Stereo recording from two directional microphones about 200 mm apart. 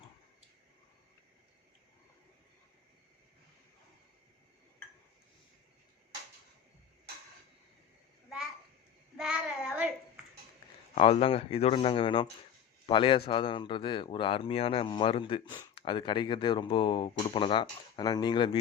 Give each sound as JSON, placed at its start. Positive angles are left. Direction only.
{"t": 9.1, "sound": "child singing", "side_deg": 0}
{"t": 10.9, "sound": "a man's voice", "side_deg": 30}